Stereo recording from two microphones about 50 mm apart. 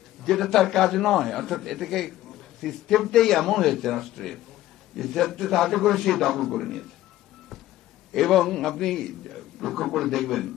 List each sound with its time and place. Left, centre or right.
0.3 s a man's voice: centre
8.1 s a man's voice: centre